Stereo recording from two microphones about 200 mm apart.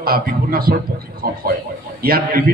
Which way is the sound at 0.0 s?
50° right (ahead or behind).